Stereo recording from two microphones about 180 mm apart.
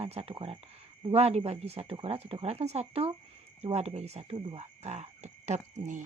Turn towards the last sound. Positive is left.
turn(degrees=-40)  # may be behind; listen again after turning